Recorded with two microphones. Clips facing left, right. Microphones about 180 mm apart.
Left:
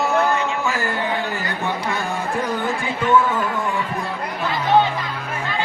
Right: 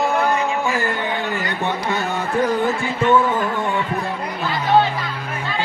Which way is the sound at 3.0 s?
25° right (ahead or behind).